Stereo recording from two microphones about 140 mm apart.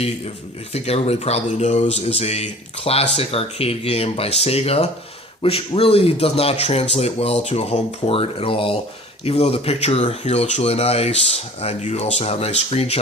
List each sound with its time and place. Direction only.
0.7 s speech: 45° left (ahead or behind)